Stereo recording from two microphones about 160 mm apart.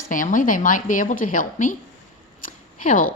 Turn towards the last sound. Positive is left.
turn(degrees=55)  # may be behind; listen again after turning